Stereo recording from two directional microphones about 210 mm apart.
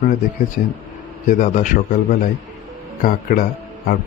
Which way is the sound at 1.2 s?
35° left (ahead or behind).